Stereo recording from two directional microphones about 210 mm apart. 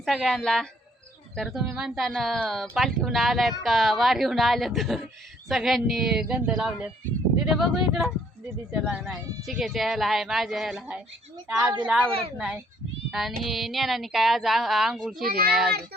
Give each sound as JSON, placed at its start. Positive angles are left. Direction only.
{"t": 0.0, "sound": "speech", "side_deg": 0}
{"t": 15.2, "sound": "a child's voice", "side_deg": -45}